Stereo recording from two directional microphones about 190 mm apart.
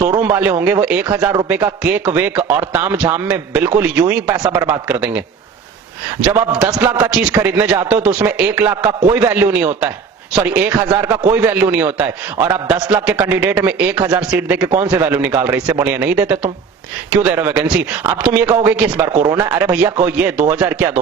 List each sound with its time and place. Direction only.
0.0 s speech: 15° right (ahead or behind)
6.2 s a man's voice: 5° right (ahead or behind)
19.5 s speech: 10° right (ahead or behind)